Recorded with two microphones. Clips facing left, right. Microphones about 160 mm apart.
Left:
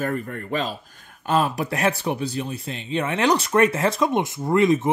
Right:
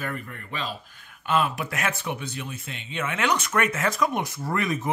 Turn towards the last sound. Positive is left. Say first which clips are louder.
# left 8 dB
turn(degrees=25)  # may be behind; listen again after turning